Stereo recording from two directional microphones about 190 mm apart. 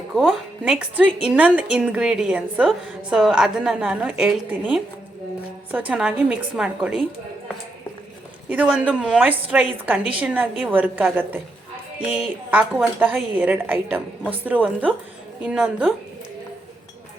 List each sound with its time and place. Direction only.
0.1 s a woman's voice: 5° right (ahead or behind)
5.9 s a woman's voice: 5° right (ahead or behind)
8.4 s a woman's voice: 5° right (ahead or behind)